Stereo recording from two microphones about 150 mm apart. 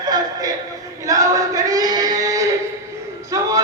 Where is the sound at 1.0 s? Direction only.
25° right (ahead or behind).